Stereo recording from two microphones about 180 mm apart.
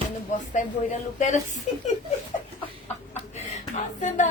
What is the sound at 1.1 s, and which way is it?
Speech, 45° left (ahead or behind).